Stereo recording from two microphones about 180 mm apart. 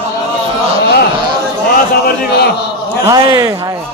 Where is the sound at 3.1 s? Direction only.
20° right (ahead or behind).